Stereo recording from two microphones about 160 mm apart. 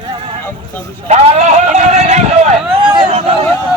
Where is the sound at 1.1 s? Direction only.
45° right (ahead or behind).